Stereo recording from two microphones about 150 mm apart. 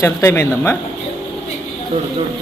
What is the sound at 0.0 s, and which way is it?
Speech, 20° left (ahead or behind).